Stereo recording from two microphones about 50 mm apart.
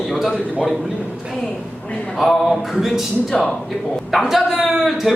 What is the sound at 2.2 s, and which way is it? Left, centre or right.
Speech, centre.